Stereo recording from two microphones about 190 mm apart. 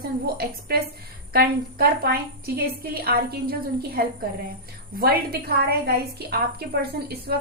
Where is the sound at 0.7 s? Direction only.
55° right (ahead or behind).